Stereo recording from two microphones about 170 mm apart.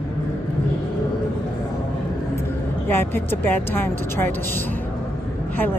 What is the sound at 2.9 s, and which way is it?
A woman's voice, 15° left (ahead or behind).